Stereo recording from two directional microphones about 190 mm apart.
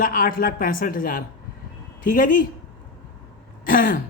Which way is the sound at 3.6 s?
45° left (ahead or behind).